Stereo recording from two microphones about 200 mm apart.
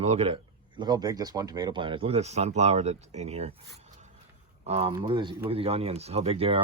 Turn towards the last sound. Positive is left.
turn(degrees=-30)  # may be behind; listen again after turning